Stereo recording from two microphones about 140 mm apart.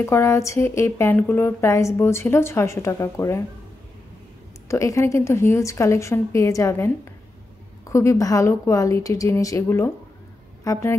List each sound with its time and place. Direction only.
0.0 s speech: 20° left (ahead or behind)
4.6 s a woman's voice: 20° left (ahead or behind)